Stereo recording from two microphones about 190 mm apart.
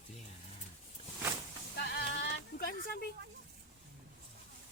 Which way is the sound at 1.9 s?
60° left (ahead or behind).